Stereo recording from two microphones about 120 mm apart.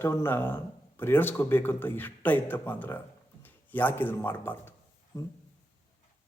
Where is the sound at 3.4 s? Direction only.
15° left (ahead or behind).